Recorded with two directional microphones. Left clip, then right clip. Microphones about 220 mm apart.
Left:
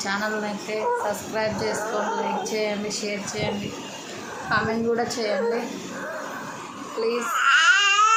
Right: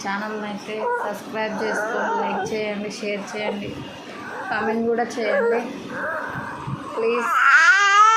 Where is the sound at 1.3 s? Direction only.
5° left (ahead or behind).